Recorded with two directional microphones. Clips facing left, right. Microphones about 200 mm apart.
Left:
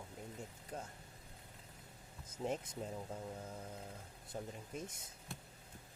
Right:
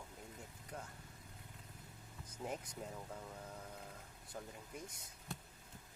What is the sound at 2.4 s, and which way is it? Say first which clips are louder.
Speech: left 5 dB; 25° left (ahead or behind).